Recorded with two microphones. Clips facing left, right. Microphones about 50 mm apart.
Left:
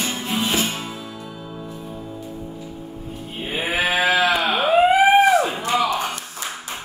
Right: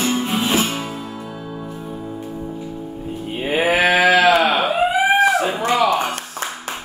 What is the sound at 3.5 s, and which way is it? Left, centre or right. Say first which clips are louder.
Sheep: right 6 dB; right.